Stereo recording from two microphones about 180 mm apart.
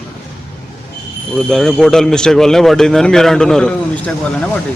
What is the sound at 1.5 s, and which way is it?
A man's voice, 5° left (ahead or behind).